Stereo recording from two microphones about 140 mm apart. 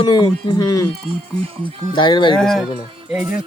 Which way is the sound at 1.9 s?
35° left (ahead or behind).